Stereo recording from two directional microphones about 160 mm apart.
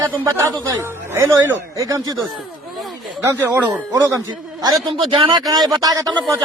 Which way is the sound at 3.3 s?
10° right (ahead or behind).